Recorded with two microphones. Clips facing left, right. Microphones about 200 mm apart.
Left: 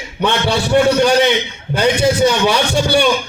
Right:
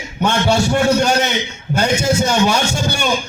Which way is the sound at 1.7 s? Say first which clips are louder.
Left 2 dB; 45° right (ahead or behind).